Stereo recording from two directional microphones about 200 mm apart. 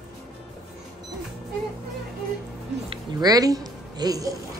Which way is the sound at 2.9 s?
20° right (ahead or behind).